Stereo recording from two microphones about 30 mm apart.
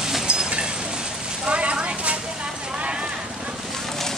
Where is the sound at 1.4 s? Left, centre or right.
Right.